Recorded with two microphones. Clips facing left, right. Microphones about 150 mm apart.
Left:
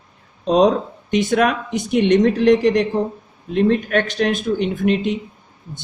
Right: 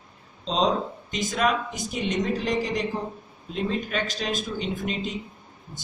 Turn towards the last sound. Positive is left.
turn(degrees=65)  # may be behind; listen again after turning